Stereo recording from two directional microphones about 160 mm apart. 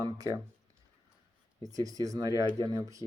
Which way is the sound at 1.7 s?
20° right (ahead or behind).